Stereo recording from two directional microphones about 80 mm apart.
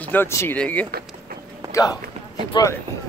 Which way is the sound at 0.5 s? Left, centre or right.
Centre.